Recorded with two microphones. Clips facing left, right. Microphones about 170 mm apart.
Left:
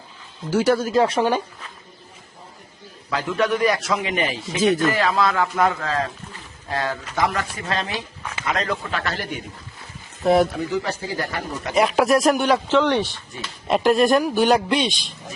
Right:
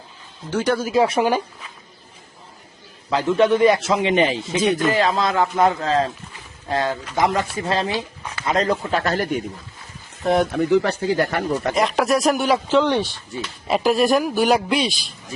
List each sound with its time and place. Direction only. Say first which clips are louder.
0.5 s speech: left 2 dB; 5° left (ahead or behind)
0.9 s speech: right 1 dB; 10° right (ahead or behind)
3.1 s speech: right 5 dB; 25° right (ahead or behind)
4.6 s speech: left 2 dB; centre (ahead or behind)
4.9 s speech: right 1 dB; 25° right (ahead or behind); by 9.4 s 45° right (ahead or behind)
10.2 s speech: left 2 dB; centre (ahead or behind)
10.5 s speech: right 7 dB; 60° right (ahead or behind)
11.7 s speech: left 4 dB; 5° left (ahead or behind)
12.6 s speech: right 1 dB; 15° right (ahead or behind)